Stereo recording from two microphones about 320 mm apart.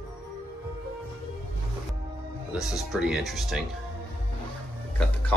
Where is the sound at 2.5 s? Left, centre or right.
Centre.